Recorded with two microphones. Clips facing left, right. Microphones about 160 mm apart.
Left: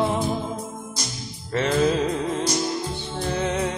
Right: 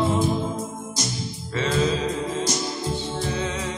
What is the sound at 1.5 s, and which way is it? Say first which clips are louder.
Music: left 3 dB; 55° left (ahead or behind).